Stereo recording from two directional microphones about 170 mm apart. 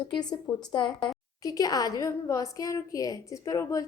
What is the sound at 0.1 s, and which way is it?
A woman's voice, 25° left (ahead or behind).